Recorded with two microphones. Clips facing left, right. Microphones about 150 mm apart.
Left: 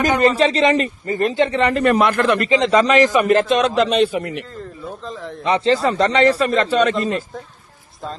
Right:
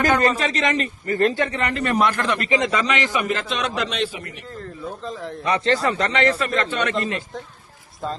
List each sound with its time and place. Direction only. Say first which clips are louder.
0.0 s a man's voice: left 2 dB; 15° left (ahead or behind)
0.3 s a man's voice: left 6 dB; 30° left (ahead or behind)
1.1 s a man's voice: left 3 dB; 20° left (ahead or behind)
1.7 s a man's voice: left 5 dB; 55° left (ahead or behind)
2.7 s a man's voice: left 9 dB; 40° left (ahead or behind)
3.2 s a man's voice: left 10 dB; 50° left (ahead or behind)
5.0 s a man's voice: even; centre (ahead or behind)
5.4 s a man's voice: left 4 dB; 25° left (ahead or behind)
6.9 s a man's voice: left 4 dB; centre (ahead or behind)